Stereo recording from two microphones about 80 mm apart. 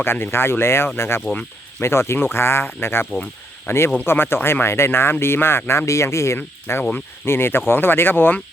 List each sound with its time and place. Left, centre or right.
0.0 s speech: left